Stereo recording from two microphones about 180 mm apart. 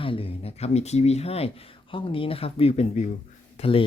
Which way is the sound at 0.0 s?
30° left (ahead or behind).